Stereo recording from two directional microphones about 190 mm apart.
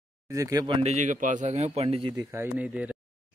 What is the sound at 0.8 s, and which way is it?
A man's voice, 40° right (ahead or behind).